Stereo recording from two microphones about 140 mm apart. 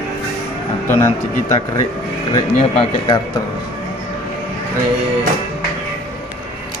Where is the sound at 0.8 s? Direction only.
15° left (ahead or behind).